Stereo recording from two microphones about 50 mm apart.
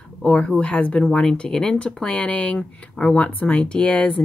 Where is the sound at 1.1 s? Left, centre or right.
Centre.